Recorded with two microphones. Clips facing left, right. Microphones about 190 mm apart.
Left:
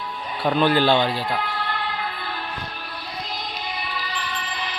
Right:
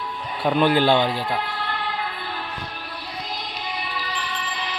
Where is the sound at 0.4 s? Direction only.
15° right (ahead or behind).